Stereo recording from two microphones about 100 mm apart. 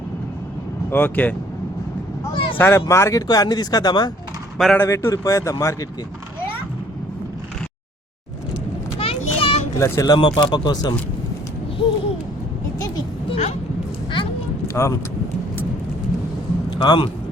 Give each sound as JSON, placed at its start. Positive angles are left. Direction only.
{"t": 0.9, "sound": "speech", "side_deg": 20}
{"t": 2.3, "sound": "speech", "side_deg": 65}
{"t": 2.6, "sound": "speech", "side_deg": 25}
{"t": 4.5, "sound": "speech", "side_deg": 5}
{"t": 4.8, "sound": "speech", "side_deg": 30}
{"t": 9.0, "sound": "a sound", "side_deg": 70}
{"t": 9.7, "sound": "speech", "side_deg": 30}
{"t": 10.1, "sound": "speech", "side_deg": 50}
{"t": 13.2, "sound": "a sound", "side_deg": 80}
{"t": 14.2, "sound": "a sound", "side_deg": 60}
{"t": 14.7, "sound": "vehicle", "side_deg": 30}
{"t": 16.6, "sound": "a man's voice", "side_deg": 45}